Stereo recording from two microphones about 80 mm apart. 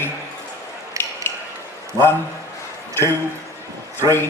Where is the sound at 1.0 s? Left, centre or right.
Right.